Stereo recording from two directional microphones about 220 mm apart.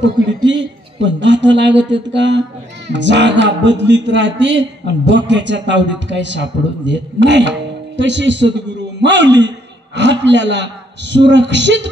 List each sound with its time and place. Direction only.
0.0 s a man's voice: 55° right (ahead or behind)